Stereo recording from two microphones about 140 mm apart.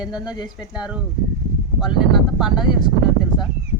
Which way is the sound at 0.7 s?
5° right (ahead or behind).